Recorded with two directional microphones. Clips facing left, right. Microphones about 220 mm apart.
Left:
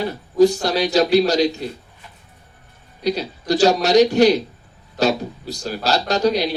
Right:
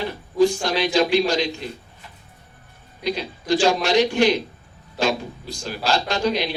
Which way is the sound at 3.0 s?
40° left (ahead or behind).